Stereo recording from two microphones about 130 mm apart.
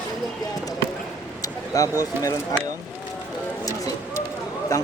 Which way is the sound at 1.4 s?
25° left (ahead or behind).